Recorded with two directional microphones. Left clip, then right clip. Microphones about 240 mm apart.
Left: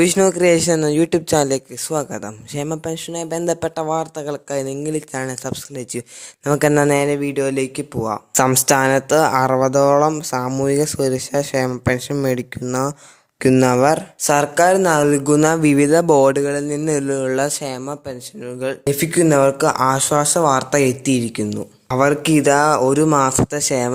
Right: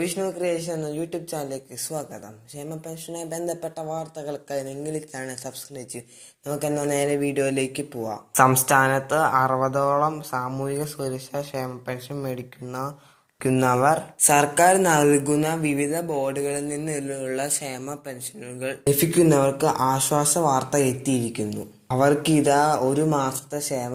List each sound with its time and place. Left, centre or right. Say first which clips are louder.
0.0 s speech: left 12 dB; left